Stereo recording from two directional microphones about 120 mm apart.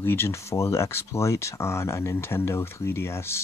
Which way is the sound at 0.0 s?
20° left (ahead or behind).